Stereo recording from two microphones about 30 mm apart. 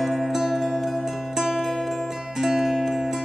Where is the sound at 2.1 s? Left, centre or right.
Centre.